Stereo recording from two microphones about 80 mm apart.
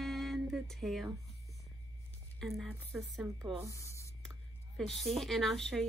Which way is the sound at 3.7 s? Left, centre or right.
Left.